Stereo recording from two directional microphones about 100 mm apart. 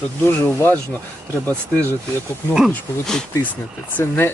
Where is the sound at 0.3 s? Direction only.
20° left (ahead or behind).